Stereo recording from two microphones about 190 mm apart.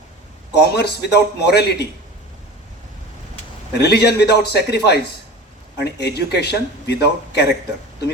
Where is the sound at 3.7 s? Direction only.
60° left (ahead or behind).